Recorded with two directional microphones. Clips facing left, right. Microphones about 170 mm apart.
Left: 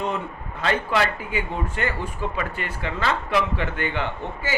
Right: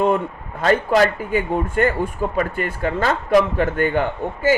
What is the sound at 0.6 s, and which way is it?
A man's voice, 45° right (ahead or behind).